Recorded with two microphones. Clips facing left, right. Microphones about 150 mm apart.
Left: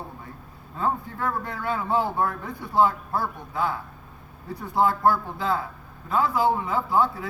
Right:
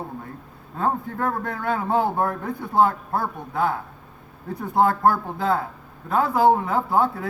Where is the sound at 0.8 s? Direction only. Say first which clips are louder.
Right 3 dB; 50° right (ahead or behind).